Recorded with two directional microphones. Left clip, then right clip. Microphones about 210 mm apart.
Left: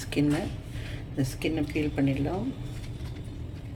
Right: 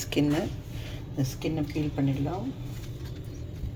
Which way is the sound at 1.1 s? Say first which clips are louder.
Left 2 dB; 15° left (ahead or behind).